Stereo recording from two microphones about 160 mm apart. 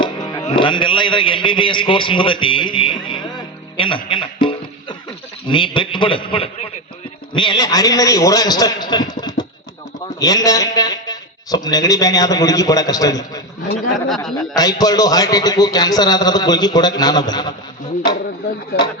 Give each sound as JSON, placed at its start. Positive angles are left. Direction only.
{"t": 0.0, "sound": "music", "side_deg": 25}
{"t": 0.4, "sound": "a man's voice", "side_deg": 30}